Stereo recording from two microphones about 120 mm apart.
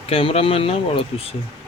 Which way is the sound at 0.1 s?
50° left (ahead or behind).